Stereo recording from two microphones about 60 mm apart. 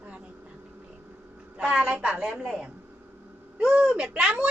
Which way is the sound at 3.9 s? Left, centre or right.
Centre.